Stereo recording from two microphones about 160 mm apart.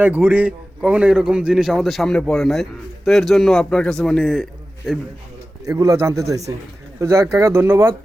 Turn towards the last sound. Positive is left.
turn(degrees=-15)  # may be behind; listen again after turning